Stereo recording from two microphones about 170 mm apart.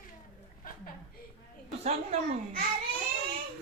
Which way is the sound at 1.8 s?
40° right (ahead or behind).